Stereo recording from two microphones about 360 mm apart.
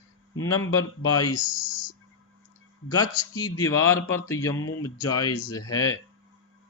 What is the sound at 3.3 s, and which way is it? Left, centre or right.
Speech, centre.